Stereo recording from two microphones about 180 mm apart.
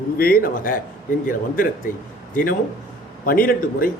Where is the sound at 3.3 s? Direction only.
55° left (ahead or behind).